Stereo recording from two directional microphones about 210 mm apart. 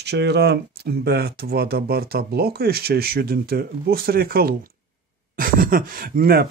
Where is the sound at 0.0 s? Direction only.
55° right (ahead or behind).